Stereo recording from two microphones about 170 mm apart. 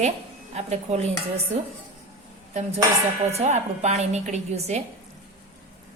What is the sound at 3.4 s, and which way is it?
A woman's voice, 40° right (ahead or behind).